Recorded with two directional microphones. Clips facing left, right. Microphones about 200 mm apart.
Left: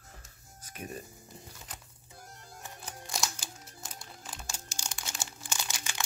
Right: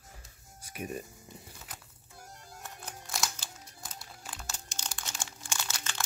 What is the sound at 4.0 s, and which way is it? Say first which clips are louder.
Crumpling: even; 5° right (ahead or behind).